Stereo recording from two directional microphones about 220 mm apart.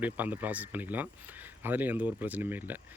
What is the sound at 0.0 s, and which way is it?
Speech, 10° right (ahead or behind).